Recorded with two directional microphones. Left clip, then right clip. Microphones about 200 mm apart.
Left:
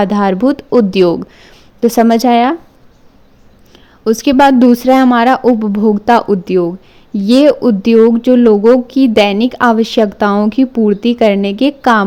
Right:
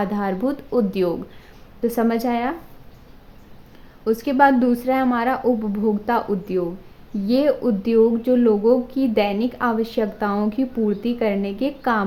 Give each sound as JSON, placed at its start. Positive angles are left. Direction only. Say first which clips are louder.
{"t": 0.0, "sound": "a woman's voice", "louder": "left 11 dB", "side_deg": 45}
{"t": 4.0, "sound": "a woman's voice", "louder": "left 8 dB", "side_deg": 50}